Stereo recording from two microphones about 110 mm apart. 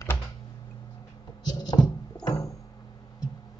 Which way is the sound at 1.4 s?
40° left (ahead or behind).